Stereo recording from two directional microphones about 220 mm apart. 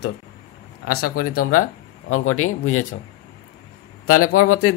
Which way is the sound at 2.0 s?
70° left (ahead or behind).